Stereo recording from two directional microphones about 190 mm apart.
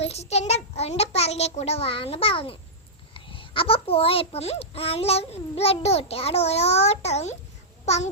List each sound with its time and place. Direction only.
0.0 s a child's voice: 35° left (ahead or behind)